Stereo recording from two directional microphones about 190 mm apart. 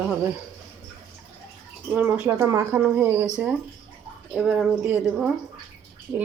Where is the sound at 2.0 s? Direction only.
10° right (ahead or behind).